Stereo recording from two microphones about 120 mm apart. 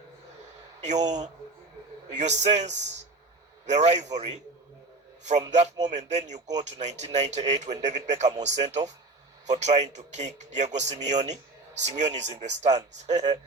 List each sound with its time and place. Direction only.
0.8 s speech: 75° right (ahead or behind)
5.4 s speech: 75° right (ahead or behind)